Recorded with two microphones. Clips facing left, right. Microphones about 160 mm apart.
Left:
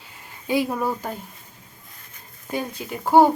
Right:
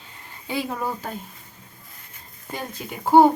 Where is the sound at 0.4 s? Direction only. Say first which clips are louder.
Left 5 dB; 10° left (ahead or behind).